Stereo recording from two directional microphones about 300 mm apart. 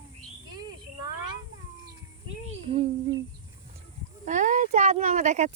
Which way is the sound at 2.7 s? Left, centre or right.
Centre.